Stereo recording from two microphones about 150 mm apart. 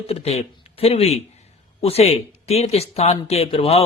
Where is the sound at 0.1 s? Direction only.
45° left (ahead or behind).